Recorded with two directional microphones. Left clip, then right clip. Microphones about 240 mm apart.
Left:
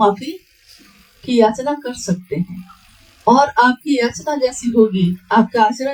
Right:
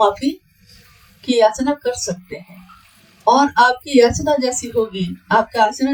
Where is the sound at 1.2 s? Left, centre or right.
Right.